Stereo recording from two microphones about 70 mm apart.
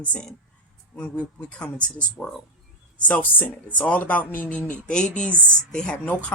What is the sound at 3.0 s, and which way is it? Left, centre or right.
Speech, left.